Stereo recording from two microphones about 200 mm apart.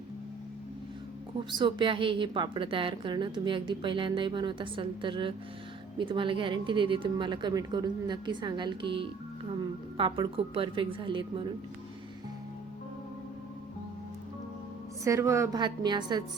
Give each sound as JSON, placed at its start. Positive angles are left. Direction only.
{"t": 1.5, "sound": "a woman's voice", "side_deg": -25}
{"t": 15.0, "sound": "a woman's voice", "side_deg": -15}